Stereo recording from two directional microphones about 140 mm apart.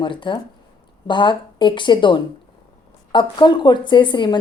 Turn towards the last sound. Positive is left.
turn(degrees=35)  # may be behind; listen again after turning